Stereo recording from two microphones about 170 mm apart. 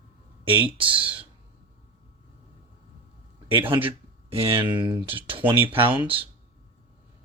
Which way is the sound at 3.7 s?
30° right (ahead or behind).